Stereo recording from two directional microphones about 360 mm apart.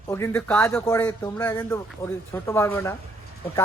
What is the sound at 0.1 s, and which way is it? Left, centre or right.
A man's voice, centre.